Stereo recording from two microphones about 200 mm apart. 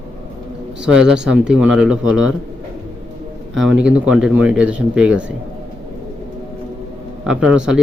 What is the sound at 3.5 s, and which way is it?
Speech, 5° right (ahead or behind).